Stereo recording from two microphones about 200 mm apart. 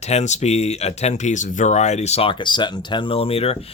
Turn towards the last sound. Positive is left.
turn(degrees=30)  # may be behind; listen again after turning